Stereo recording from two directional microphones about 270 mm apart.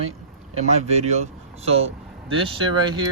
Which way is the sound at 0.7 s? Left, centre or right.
Right.